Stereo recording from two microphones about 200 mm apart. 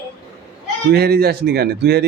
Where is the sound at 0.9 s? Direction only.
50° right (ahead or behind).